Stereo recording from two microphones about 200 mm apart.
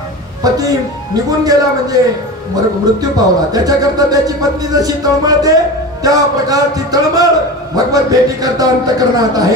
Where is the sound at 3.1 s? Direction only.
20° right (ahead or behind).